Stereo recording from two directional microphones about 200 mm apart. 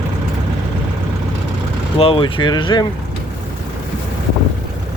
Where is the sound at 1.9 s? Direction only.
25° left (ahead or behind).